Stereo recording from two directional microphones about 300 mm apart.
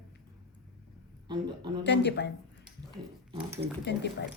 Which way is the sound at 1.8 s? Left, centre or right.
Left.